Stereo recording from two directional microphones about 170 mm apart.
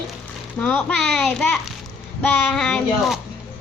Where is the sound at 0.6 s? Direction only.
5° left (ahead or behind).